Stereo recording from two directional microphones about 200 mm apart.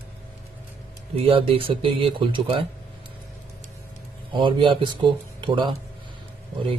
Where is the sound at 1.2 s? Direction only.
25° right (ahead or behind).